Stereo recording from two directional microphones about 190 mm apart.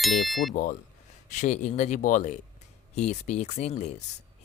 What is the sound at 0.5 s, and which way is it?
Speech, 45° left (ahead or behind).